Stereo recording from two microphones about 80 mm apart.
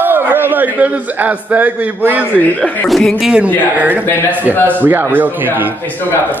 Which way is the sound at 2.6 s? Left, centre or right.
Centre.